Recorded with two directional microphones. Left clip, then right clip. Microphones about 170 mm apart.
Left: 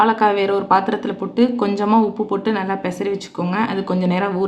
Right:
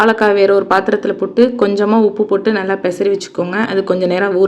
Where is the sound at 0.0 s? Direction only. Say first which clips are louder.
Right 5 dB; 20° right (ahead or behind).